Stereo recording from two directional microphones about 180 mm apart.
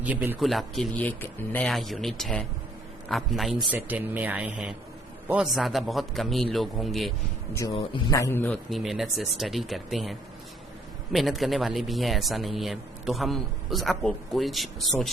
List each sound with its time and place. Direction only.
0.0 s speech: 10° right (ahead or behind)
7.7 s speech: 30° left (ahead or behind)
8.1 s a man's voice: 15° left (ahead or behind)
8.7 s speech: centre (ahead or behind)